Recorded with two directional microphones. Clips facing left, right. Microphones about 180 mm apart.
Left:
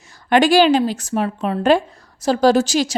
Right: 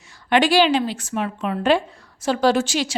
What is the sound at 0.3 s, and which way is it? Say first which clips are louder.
A woman's voice: left 4 dB; 45° left (ahead or behind).